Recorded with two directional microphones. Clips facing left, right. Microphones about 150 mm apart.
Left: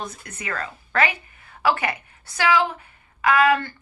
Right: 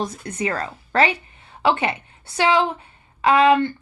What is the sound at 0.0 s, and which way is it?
A woman's voice, 30° right (ahead or behind).